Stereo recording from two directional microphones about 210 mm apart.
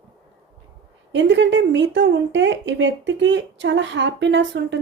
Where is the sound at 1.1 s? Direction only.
60° right (ahead or behind).